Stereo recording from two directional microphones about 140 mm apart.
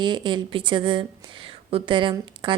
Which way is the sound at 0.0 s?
35° right (ahead or behind).